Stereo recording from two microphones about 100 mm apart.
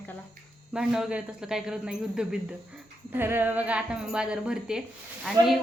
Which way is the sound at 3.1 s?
20° right (ahead or behind).